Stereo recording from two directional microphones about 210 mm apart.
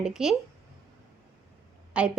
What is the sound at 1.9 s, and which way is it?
Speech, 5° right (ahead or behind).